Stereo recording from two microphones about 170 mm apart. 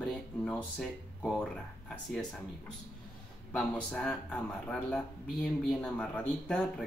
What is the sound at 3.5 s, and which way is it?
Speech, 5° left (ahead or behind).